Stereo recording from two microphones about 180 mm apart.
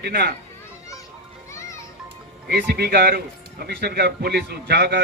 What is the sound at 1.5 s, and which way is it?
Children playing, 15° left (ahead or behind).